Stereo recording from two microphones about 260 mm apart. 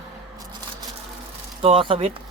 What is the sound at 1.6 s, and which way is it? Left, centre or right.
Speech, centre.